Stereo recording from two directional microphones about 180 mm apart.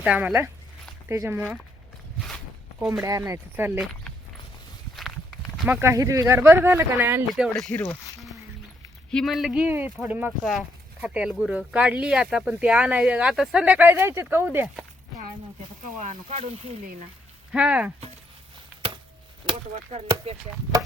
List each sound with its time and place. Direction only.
0.0 s speech: 5° right (ahead or behind)
2.7 s speech: centre (ahead or behind)
3.0 s speech: 20° right (ahead or behind)
4.9 s walk: centre (ahead or behind)
5.8 s speech: 15° right (ahead or behind)
7.3 s speech: centre (ahead or behind)
8.0 s a sound: centre (ahead or behind)
9.0 s speech: centre (ahead or behind)
16.0 s speech: 40° right (ahead or behind)
17.5 s speech: 5° right (ahead or behind)
19.5 s chop: 30° right (ahead or behind)
19.9 s speech: 35° right (ahead or behind)